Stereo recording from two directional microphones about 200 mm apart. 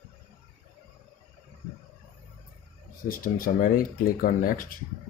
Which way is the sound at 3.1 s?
45° left (ahead or behind).